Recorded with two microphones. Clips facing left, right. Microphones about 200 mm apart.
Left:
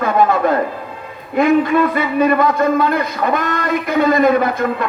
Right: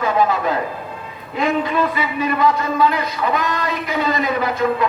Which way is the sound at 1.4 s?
55° left (ahead or behind).